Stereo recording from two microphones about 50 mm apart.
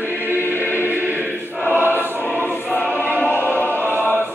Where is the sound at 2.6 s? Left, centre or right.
Left.